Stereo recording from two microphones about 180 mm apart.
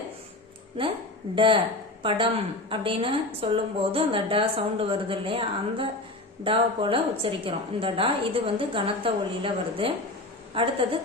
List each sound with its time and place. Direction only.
1.4 s a woman's voice: 30° right (ahead or behind)